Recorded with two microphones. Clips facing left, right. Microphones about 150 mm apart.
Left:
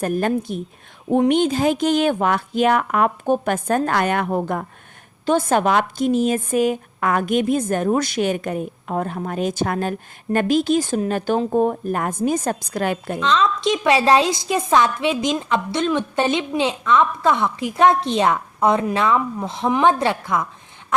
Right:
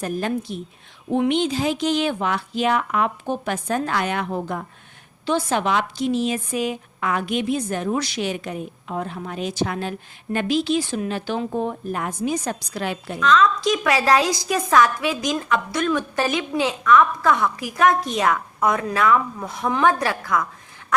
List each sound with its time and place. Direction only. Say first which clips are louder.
0.0 s speech: left 4 dB; 50° left (ahead or behind)
13.1 s a woman's voice: right 3 dB; 25° left (ahead or behind)